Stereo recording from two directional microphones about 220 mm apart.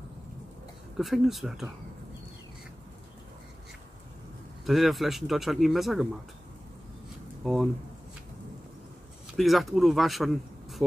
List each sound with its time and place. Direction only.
0.9 s speech: centre (ahead or behind)
4.6 s speech: centre (ahead or behind)
9.4 s speech: centre (ahead or behind)